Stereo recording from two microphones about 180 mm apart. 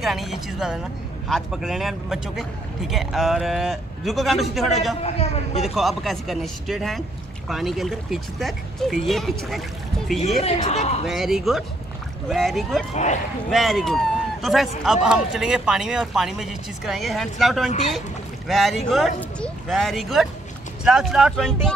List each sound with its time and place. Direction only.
0.0 s a man's voice: centre (ahead or behind)
5.0 s a man's voice: 35° left (ahead or behind)
5.8 s a man's voice: centre (ahead or behind)
10.4 s a man's voice: 40° left (ahead or behind)
11.1 s a man's voice: centre (ahead or behind)
12.9 s a man's voice: 40° left (ahead or behind)
13.5 s a man's voice: centre (ahead or behind)